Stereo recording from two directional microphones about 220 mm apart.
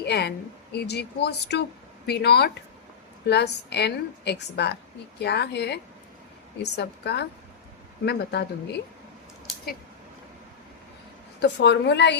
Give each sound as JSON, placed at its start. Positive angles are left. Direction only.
{"t": 0.0, "sound": "a woman's voice", "side_deg": 50}
{"t": 11.3, "sound": "a woman's voice", "side_deg": 50}